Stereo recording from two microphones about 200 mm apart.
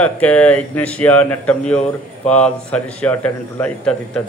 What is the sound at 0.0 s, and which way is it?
A man's voice, 5° left (ahead or behind).